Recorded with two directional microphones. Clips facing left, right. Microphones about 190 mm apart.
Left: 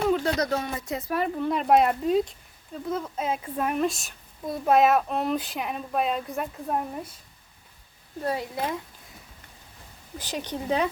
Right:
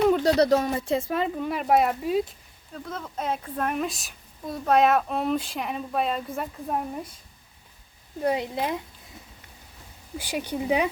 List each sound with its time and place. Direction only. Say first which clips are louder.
0.1 s speech: right 5 dB; 35° right (ahead or behind); by 1.5 s 20° right (ahead or behind)
1.5 s a woman's voice: left 2 dB; 5° right (ahead or behind)
2.7 s a woman's voice: left 4 dB; 10° left (ahead or behind)
8.2 s speech: right 3 dB; 20° right (ahead or behind)
10.2 s speech: right 3 dB; 10° right (ahead or behind)